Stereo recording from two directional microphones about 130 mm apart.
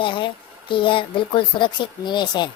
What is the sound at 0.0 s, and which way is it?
Speech, 40° left (ahead or behind).